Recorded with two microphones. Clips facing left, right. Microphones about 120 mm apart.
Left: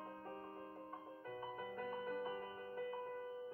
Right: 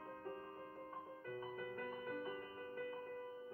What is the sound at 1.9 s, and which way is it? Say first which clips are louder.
Music: left 2 dB; 35° left (ahead or behind).